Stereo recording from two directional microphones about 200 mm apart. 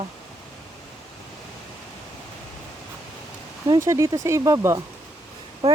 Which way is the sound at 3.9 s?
15° right (ahead or behind).